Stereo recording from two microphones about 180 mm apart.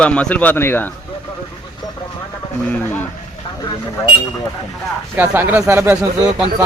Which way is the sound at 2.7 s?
10° left (ahead or behind).